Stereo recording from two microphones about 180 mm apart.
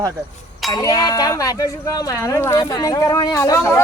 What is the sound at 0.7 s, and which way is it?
Speech, 20° left (ahead or behind).